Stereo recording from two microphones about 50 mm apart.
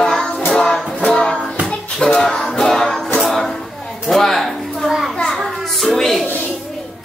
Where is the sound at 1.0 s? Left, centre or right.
Centre.